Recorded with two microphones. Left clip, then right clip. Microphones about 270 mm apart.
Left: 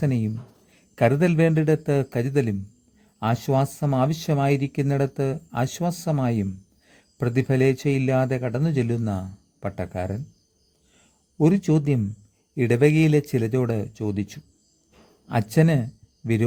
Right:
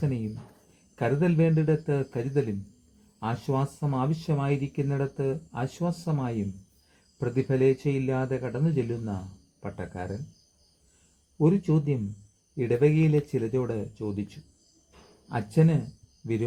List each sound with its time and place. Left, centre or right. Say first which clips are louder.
0.9 s speech: left 6 dB; left
11.3 s speech: left 4 dB; left